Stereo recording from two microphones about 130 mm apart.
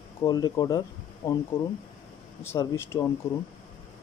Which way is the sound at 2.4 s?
20° left (ahead or behind).